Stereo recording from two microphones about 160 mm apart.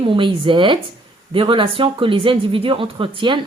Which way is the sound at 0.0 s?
35° right (ahead or behind).